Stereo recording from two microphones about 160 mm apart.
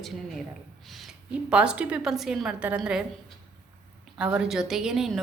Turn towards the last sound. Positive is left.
turn(degrees=-5)  # may be behind; listen again after turning